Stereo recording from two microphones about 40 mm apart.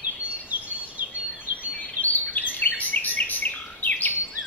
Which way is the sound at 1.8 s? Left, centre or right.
Left.